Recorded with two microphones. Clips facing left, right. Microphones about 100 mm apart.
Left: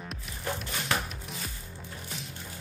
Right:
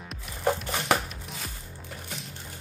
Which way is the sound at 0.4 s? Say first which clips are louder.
Right 8 dB; 75° right (ahead or behind).